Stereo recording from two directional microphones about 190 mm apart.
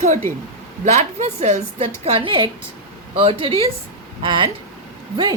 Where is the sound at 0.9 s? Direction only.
40° right (ahead or behind).